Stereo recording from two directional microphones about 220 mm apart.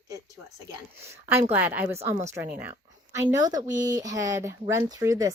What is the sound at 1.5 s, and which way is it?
Speech, 10° right (ahead or behind).